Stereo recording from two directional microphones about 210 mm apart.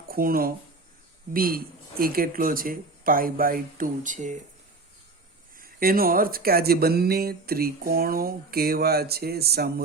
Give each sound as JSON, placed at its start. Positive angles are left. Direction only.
{"t": 0.1, "sound": "speech", "side_deg": -45}
{"t": 5.5, "sound": "speech", "side_deg": -45}